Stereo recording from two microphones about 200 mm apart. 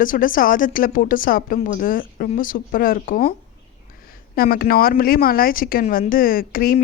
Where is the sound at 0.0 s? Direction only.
40° left (ahead or behind).